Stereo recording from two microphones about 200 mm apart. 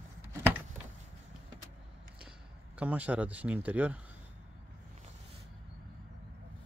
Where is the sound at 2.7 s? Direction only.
5° right (ahead or behind).